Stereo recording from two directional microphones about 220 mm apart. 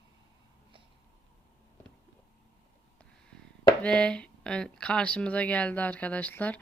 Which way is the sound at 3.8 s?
5° left (ahead or behind).